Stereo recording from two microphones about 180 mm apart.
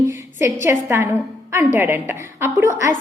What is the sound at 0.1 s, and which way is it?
A woman's voice, 15° right (ahead or behind).